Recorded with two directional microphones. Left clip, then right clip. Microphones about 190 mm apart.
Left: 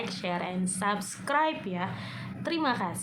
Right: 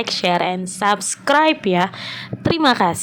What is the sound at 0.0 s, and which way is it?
Speech, 50° right (ahead or behind).